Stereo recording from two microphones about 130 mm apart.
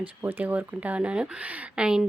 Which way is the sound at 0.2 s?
15° right (ahead or behind).